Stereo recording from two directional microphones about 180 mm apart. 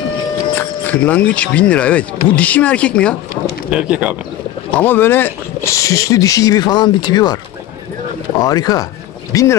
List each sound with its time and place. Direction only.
0.6 s speech: 10° left (ahead or behind)
3.7 s speech: 5° right (ahead or behind)
4.7 s speech: 10° left (ahead or behind)
8.4 s speech: 20° left (ahead or behind)